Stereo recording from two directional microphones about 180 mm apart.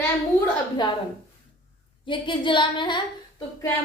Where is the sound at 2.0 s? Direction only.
25° left (ahead or behind).